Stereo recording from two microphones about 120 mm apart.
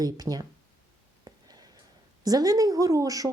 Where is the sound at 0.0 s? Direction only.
30° right (ahead or behind).